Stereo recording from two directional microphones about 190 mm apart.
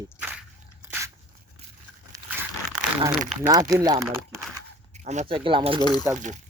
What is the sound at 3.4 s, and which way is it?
Speech, 20° right (ahead or behind).